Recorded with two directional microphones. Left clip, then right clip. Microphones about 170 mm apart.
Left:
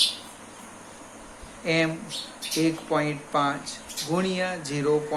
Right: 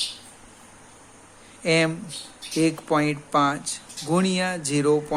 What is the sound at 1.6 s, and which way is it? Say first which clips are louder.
Speech: right 3 dB; 60° right (ahead or behind).